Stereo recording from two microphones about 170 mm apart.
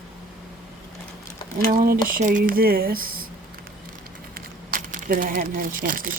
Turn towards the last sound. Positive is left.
turn(degrees=-55)  # may be behind; listen again after turning